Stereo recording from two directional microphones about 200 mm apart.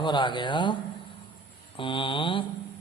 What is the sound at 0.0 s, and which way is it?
A man's voice, 25° left (ahead or behind).